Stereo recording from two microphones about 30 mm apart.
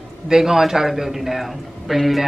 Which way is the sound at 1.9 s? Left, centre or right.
Centre.